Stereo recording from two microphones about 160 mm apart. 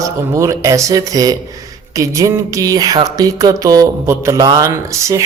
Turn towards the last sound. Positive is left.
turn(degrees=-20)  # may be behind; listen again after turning